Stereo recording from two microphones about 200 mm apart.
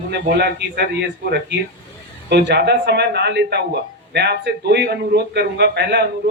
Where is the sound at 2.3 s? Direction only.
55° right (ahead or behind).